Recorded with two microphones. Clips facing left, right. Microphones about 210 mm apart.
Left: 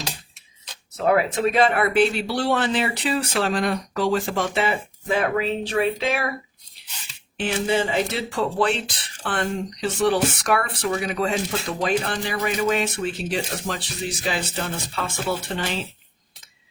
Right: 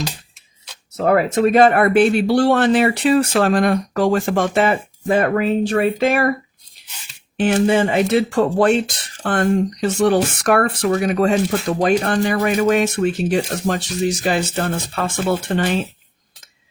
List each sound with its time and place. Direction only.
0.9 s speech: 45° right (ahead or behind)
7.3 s speech: 50° right (ahead or behind)